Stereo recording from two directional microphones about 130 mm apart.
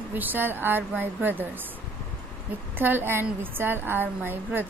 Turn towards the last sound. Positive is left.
turn(degrees=-15)  # may be behind; listen again after turning